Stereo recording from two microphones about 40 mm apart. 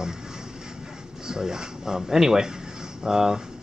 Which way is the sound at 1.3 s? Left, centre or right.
Centre.